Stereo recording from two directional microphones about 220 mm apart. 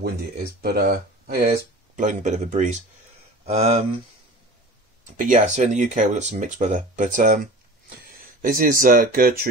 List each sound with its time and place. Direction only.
0.0 s speech: 45° right (ahead or behind)
2.0 s speech: 35° right (ahead or behind)
5.1 s speech: 35° right (ahead or behind)